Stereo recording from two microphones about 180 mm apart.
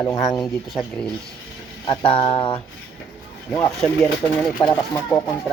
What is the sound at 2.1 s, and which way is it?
Speech, 30° left (ahead or behind).